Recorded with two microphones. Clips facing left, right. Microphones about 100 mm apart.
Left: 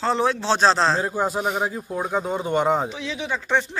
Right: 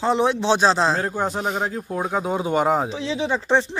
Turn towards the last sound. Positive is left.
turn(degrees=-30)  # may be behind; listen again after turning